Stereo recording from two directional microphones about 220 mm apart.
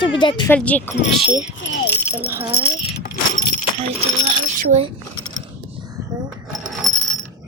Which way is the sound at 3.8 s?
25° right (ahead or behind).